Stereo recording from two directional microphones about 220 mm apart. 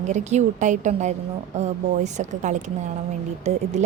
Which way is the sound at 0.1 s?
30° right (ahead or behind).